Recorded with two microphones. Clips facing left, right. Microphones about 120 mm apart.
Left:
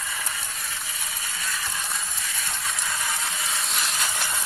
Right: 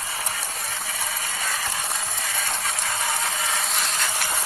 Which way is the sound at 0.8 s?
75° right (ahead or behind).